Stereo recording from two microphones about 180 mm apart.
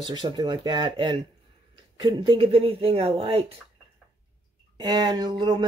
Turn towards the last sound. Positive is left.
turn(degrees=-25)  # may be behind; listen again after turning